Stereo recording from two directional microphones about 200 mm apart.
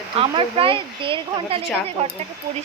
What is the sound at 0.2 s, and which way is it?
Speech, 25° right (ahead or behind).